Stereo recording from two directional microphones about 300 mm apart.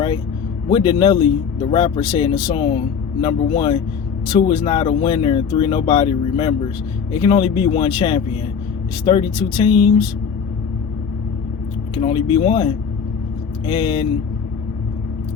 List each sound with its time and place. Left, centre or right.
0.7 s speech: centre
11.9 s speech: centre